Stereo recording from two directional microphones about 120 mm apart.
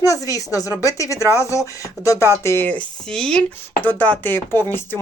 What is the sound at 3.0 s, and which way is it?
Speech, 5° left (ahead or behind).